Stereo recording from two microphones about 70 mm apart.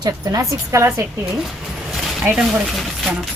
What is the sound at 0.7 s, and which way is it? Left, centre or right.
Speech, right.